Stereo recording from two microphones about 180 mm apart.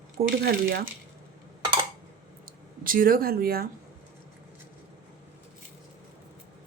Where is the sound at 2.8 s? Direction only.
50° right (ahead or behind).